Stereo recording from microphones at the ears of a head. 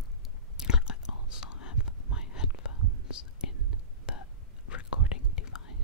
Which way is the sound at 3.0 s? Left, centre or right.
Left.